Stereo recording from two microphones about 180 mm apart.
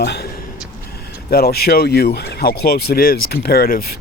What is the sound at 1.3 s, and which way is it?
Speech, 60° left (ahead or behind).